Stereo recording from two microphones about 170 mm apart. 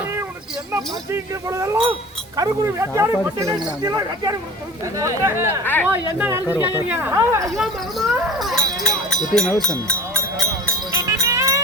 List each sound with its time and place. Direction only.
0.7 s speech: 15° right (ahead or behind)
7.5 s speech: centre (ahead or behind)
8.8 s run: 5° left (ahead or behind)
9.3 s speech: 5° left (ahead or behind)
10.9 s sheep: 20° right (ahead or behind)